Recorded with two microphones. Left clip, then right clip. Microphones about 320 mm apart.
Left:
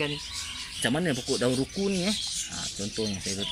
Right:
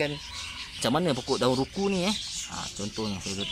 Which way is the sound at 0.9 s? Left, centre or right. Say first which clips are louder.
Right 3 dB; right.